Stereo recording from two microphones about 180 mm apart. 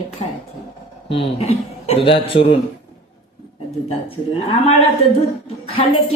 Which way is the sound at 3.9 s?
30° left (ahead or behind).